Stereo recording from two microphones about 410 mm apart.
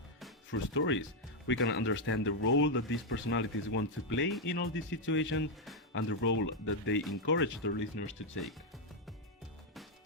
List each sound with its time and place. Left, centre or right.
0.5 s speech: left